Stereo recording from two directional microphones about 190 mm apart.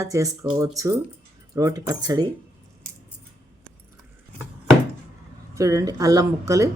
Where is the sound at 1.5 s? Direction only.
20° right (ahead or behind).